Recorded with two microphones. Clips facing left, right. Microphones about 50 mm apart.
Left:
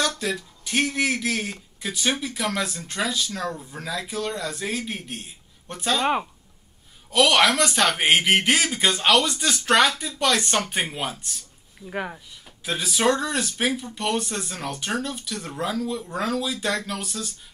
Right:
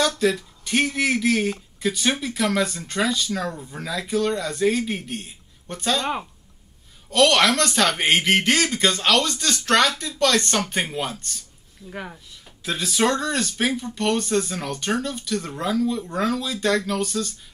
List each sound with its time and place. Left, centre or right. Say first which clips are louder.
0.0 s speech: right 5 dB; centre
7.1 s speech: right 1 dB; centre
12.6 s speech: even; centre